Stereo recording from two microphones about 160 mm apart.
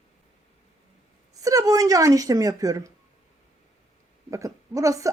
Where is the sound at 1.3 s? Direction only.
20° right (ahead or behind).